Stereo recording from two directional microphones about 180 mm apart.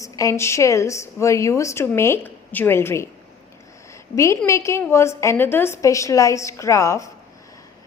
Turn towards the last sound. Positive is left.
turn(degrees=15)  # may be behind; listen again after turning